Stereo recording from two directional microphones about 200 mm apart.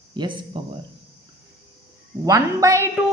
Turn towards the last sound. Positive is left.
turn(degrees=-15)  # may be behind; listen again after turning